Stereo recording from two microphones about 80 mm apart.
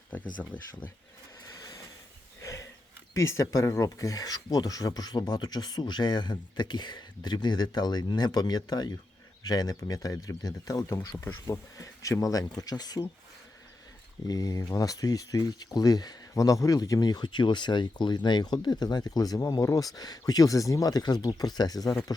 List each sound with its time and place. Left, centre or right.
0.1 s speech: left
2.4 s a sound: left
3.2 s speech: left
11.1 s speech: left
11.5 s speech: left
14.3 s speech: left